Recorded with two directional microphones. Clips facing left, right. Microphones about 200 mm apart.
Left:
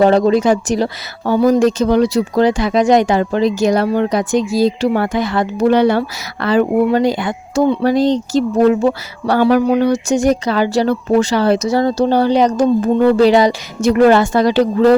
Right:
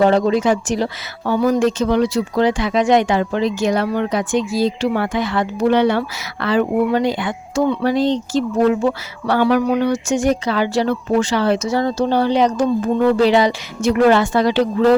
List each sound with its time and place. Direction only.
0.0 s speech: 35° left (ahead or behind)